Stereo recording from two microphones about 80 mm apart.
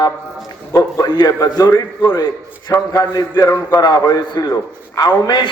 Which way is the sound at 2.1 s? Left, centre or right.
Left.